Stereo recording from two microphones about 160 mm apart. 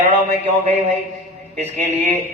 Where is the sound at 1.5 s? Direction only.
45° right (ahead or behind).